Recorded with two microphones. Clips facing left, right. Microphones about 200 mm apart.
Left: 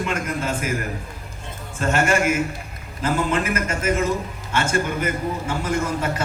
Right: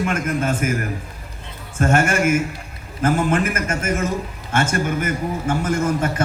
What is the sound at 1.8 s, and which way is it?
A man's voice, 50° right (ahead or behind).